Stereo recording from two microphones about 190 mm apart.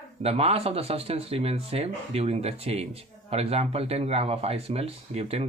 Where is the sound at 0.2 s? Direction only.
30° right (ahead or behind).